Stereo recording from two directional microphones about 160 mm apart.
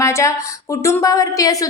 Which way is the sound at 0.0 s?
20° left (ahead or behind).